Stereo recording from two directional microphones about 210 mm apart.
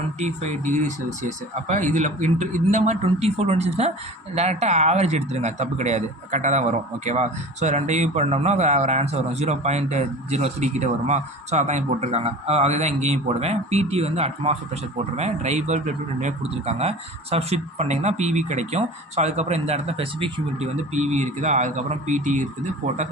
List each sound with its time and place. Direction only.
0.2 s speech: 35° right (ahead or behind)